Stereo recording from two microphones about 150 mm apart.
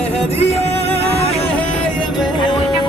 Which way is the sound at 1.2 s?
40° left (ahead or behind).